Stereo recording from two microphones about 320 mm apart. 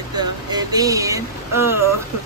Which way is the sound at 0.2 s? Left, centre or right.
Centre.